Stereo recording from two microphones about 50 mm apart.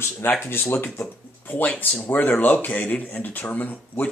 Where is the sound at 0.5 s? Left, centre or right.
Left.